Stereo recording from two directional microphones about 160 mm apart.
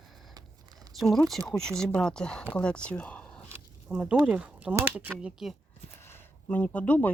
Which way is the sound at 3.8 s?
5° right (ahead or behind).